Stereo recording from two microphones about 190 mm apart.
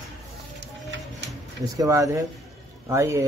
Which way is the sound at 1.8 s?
15° right (ahead or behind).